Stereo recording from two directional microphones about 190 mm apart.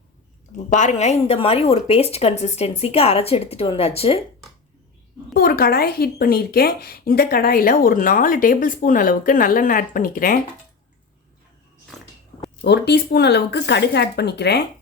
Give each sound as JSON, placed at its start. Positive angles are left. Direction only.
{"t": 0.7, "sound": "a woman's voice", "side_deg": 40}
{"t": 5.3, "sound": "a woman's voice", "side_deg": 50}
{"t": 12.6, "sound": "speech", "side_deg": 60}